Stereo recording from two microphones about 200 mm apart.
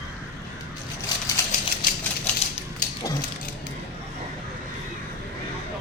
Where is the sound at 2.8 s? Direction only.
40° left (ahead or behind).